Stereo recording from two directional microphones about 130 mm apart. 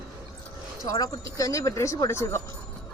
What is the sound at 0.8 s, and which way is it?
Speech, 30° left (ahead or behind).